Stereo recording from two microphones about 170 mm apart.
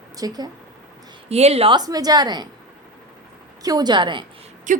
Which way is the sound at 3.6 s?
25° right (ahead or behind).